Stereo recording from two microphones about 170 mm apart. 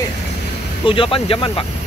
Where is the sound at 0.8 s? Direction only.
30° left (ahead or behind).